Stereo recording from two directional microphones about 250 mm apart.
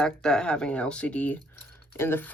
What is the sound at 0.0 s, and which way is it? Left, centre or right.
Speech, centre.